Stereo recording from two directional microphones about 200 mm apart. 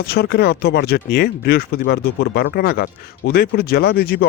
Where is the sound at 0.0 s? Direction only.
50° left (ahead or behind).